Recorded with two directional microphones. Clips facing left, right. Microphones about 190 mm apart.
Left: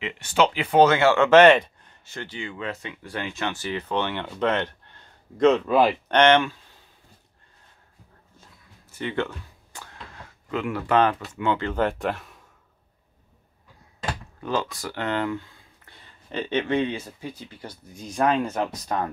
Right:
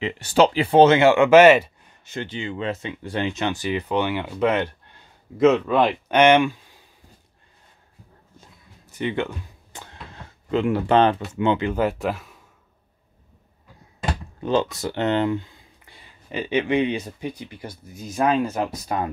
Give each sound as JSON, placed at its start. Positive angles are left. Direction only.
{"t": 0.0, "sound": "speech", "side_deg": -35}
{"t": 2.0, "sound": "speech", "side_deg": -20}
{"t": 6.1, "sound": "speech", "side_deg": -10}
{"t": 8.8, "sound": "a sound", "side_deg": -15}
{"t": 11.3, "sound": "speech", "side_deg": -20}
{"t": 14.4, "sound": "speech", "side_deg": -25}